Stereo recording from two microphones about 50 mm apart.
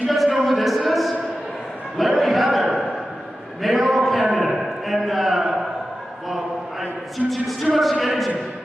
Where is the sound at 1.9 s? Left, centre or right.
Centre.